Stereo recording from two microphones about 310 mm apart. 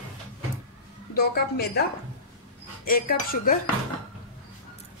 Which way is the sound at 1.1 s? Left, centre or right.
Left.